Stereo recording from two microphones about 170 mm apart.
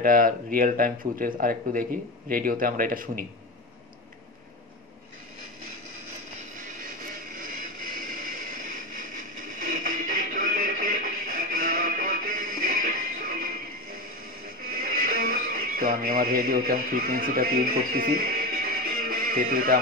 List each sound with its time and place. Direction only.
0.0 s speech: 55° right (ahead or behind)
7.3 s a sound: 55° right (ahead or behind)
14.7 s radio: 55° right (ahead or behind)